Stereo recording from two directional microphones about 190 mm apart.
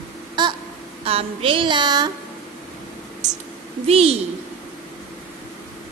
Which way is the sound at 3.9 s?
30° right (ahead or behind).